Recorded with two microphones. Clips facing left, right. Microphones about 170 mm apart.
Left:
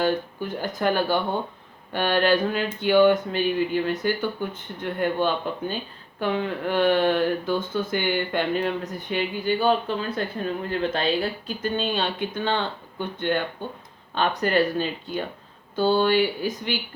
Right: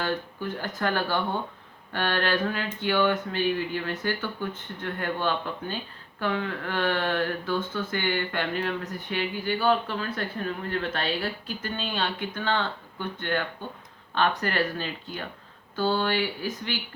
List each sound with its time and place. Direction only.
0.0 s speech: 15° left (ahead or behind)